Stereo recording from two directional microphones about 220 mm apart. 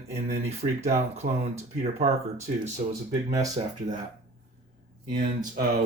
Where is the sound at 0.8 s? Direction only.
30° right (ahead or behind).